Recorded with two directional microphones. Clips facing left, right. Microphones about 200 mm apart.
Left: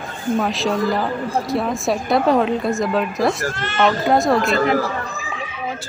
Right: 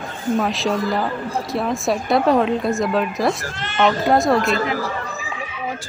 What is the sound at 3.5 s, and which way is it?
Speech, 15° right (ahead or behind).